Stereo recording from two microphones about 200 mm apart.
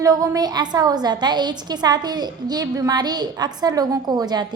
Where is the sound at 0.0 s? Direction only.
15° right (ahead or behind).